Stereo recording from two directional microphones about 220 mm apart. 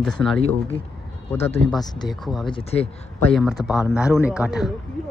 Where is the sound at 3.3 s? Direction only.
Centre (ahead or behind).